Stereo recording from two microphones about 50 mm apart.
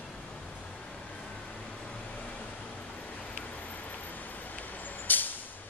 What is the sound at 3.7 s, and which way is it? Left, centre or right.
Vehicle, left.